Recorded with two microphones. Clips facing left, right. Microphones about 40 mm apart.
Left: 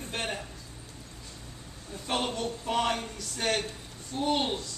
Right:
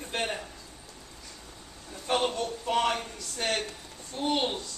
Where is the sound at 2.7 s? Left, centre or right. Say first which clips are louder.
Right 2 dB; centre.